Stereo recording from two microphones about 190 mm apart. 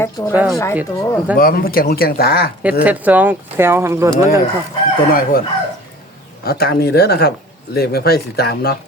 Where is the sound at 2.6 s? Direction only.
5° right (ahead or behind).